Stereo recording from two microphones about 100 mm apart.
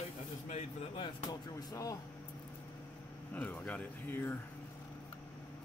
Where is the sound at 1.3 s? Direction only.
40° left (ahead or behind).